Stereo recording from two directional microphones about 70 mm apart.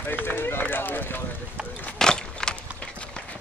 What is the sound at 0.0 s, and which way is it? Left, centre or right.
Run, left.